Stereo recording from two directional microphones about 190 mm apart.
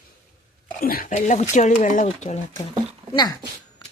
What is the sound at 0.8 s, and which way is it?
Speech, 50° left (ahead or behind).